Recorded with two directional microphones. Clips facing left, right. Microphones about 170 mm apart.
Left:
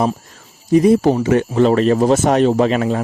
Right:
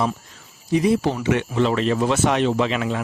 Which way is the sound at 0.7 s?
45° left (ahead or behind).